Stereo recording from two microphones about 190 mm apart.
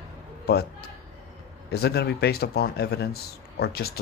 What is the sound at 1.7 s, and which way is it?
Speech, 55° left (ahead or behind).